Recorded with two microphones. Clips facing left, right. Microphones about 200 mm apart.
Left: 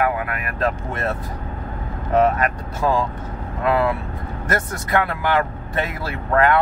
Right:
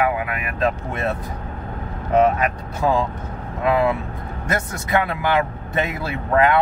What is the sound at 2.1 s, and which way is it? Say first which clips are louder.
Speech: right 1 dB; 15° right (ahead or behind).